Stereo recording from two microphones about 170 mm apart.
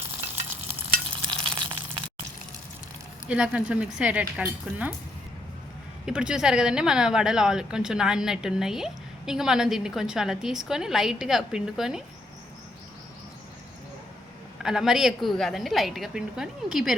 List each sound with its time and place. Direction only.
1.1 s stir: 30° right (ahead or behind)
3.2 s speech: 5° right (ahead or behind)
6.1 s speech: 5° right (ahead or behind)
14.6 s speech: 5° right (ahead or behind)